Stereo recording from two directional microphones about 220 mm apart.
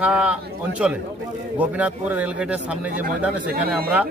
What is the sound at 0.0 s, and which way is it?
A man's voice, 5° right (ahead or behind).